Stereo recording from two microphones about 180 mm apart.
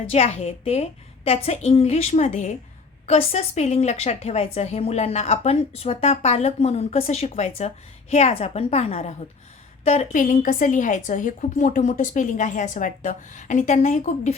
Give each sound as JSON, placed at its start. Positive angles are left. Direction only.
{"t": 0.1, "sound": "a woman's voice", "side_deg": 35}